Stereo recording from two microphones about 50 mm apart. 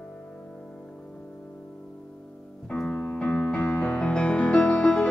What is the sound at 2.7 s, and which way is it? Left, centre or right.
Music, left.